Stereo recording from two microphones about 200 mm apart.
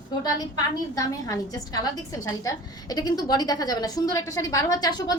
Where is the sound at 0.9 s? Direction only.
15° left (ahead or behind).